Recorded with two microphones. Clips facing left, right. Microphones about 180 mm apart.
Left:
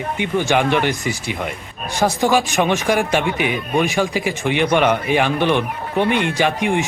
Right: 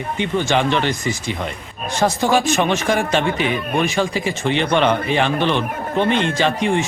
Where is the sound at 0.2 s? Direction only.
10° left (ahead or behind).